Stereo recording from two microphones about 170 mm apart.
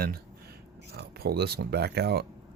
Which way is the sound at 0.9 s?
70° right (ahead or behind).